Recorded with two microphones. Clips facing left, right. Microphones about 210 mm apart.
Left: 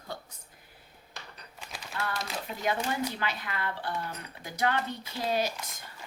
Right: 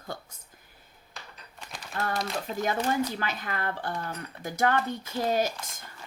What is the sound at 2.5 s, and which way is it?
A woman's voice, 45° right (ahead or behind).